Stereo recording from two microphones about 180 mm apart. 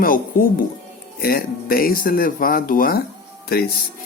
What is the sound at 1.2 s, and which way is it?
Speech, 55° left (ahead or behind).